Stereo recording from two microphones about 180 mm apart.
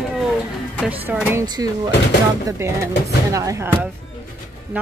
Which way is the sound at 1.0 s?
10° right (ahead or behind).